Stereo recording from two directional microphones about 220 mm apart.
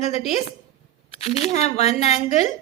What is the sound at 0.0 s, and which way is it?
Speech, 30° left (ahead or behind).